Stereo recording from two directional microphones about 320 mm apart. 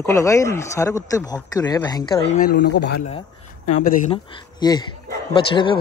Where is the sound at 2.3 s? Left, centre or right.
Left; by 5.7 s centre.